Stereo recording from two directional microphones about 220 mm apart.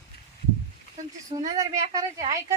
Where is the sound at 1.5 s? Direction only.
15° right (ahead or behind).